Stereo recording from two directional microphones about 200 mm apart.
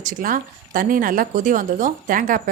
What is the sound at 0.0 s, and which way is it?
A woman's voice, 40° right (ahead or behind).